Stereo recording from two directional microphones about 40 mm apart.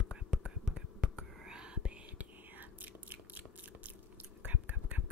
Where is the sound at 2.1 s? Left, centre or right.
Right.